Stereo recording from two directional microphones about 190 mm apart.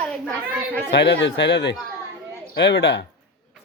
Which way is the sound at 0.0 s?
5° left (ahead or behind).